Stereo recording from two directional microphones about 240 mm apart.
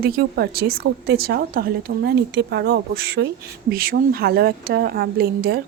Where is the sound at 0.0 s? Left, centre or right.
Right.